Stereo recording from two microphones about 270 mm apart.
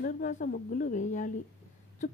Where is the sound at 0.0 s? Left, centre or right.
Left.